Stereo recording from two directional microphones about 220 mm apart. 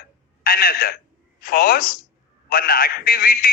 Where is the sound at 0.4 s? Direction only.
40° left (ahead or behind).